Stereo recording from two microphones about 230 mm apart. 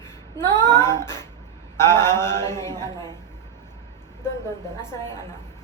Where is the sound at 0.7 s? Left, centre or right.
Centre.